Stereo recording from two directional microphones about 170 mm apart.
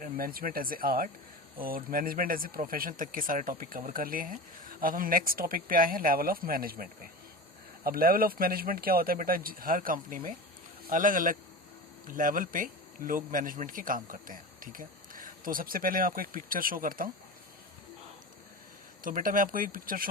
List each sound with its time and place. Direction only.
0.0 s speech: 60° right (ahead or behind)
19.0 s speech: 55° right (ahead or behind)